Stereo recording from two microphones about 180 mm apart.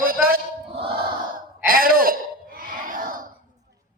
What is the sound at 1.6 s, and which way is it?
Throat clearing, 55° right (ahead or behind).